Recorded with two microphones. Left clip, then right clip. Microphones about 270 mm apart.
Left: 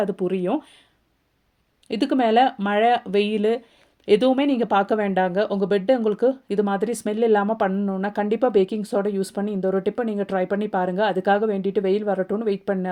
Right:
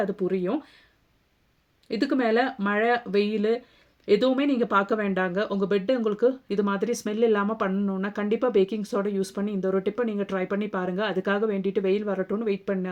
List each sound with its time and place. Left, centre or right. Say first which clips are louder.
0.0 s speech: left 3 dB; left
1.9 s speech: left 4 dB; centre